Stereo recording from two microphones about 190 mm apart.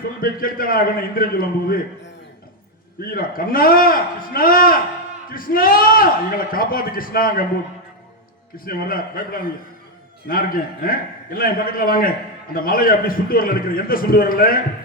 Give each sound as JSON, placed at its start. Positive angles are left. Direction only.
{"t": 0.2, "sound": "a man's voice", "side_deg": 50}
{"t": 3.1, "sound": "a man's voice", "side_deg": 50}
{"t": 8.5, "sound": "a man's voice", "side_deg": 50}